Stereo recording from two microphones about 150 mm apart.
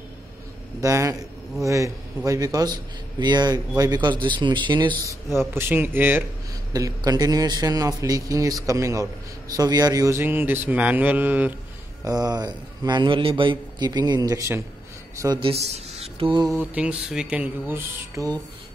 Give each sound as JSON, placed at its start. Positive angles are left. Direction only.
{"t": 0.7, "sound": "a man's voice", "side_deg": -20}
{"t": 5.5, "sound": "speech", "side_deg": -15}
{"t": 6.7, "sound": "a man's voice", "side_deg": -25}
{"t": 12.0, "sound": "a man's voice", "side_deg": -25}
{"t": 15.4, "sound": "speech", "side_deg": -40}
{"t": 16.5, "sound": "speech", "side_deg": -10}